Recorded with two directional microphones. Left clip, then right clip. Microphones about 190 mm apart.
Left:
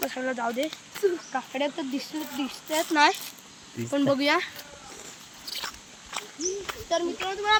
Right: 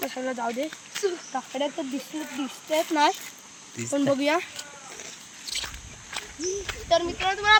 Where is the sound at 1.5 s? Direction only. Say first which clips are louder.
Right 1 dB; 20° right (ahead or behind).